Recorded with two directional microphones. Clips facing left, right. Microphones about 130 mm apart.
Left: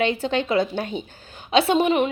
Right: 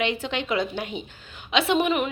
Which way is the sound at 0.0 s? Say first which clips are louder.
Left 5 dB; 35° left (ahead or behind).